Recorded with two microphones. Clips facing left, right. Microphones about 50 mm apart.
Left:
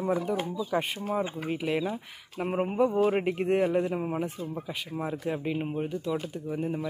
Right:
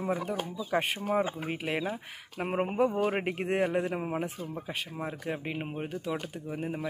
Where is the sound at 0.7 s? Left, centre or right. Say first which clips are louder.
Right 2 dB; right.